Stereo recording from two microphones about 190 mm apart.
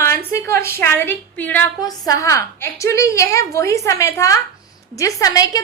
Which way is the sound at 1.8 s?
20° left (ahead or behind).